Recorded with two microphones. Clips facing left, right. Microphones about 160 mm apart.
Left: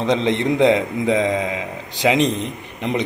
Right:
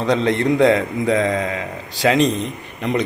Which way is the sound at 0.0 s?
20° left (ahead or behind).